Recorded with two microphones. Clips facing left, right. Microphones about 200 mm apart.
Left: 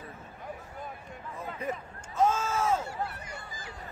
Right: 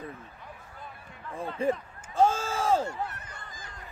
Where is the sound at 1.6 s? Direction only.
30° right (ahead or behind).